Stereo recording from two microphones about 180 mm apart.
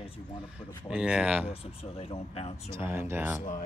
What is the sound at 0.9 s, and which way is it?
Speech, 5° right (ahead or behind).